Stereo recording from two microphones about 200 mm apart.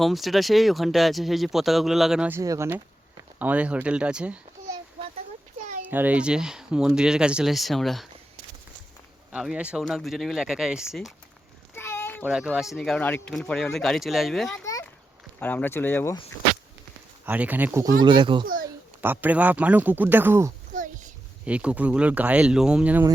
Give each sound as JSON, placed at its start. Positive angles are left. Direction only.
{"t": 0.0, "sound": "speech", "side_deg": 0}
{"t": 5.8, "sound": "speech", "side_deg": -10}
{"t": 9.3, "sound": "speech", "side_deg": -5}
{"t": 11.7, "sound": "a sound", "side_deg": 10}
{"t": 12.2, "sound": "speech", "side_deg": -5}
{"t": 14.6, "sound": "a sound", "side_deg": 15}
{"t": 15.4, "sound": "speech", "side_deg": 10}
{"t": 17.2, "sound": "speech", "side_deg": -5}
{"t": 18.0, "sound": "a child's voice", "side_deg": -25}
{"t": 19.0, "sound": "speech", "side_deg": -10}
{"t": 20.7, "sound": "a sound", "side_deg": -40}
{"t": 21.4, "sound": "speech", "side_deg": -5}